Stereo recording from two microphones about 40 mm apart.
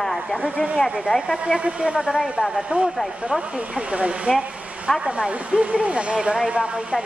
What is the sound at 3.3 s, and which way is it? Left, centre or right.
Speech, right.